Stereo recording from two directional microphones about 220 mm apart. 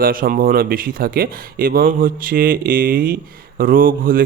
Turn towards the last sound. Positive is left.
turn(degrees=-40)  # may be behind; listen again after turning